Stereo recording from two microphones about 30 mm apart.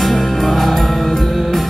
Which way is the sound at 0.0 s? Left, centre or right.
Centre.